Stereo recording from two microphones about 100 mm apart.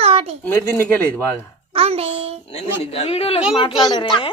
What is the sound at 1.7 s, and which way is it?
Music, 85° right.